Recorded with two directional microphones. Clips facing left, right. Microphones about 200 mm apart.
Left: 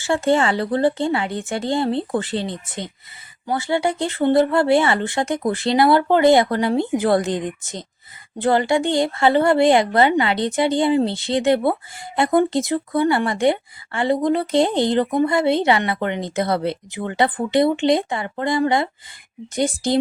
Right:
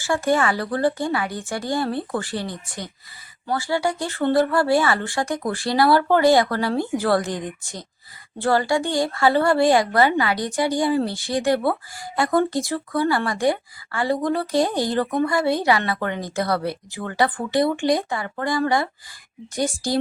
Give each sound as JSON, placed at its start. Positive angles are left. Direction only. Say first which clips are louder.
{"t": 0.0, "sound": "a woman's voice", "louder": "left 2 dB", "side_deg": 25}